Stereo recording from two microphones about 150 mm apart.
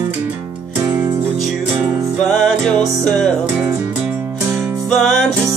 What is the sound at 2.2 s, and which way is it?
Music, centre (ahead or behind).